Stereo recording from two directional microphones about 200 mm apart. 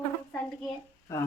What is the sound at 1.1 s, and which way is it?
Speech, 15° left (ahead or behind).